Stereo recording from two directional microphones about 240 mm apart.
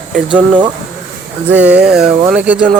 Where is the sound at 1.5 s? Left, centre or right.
Centre.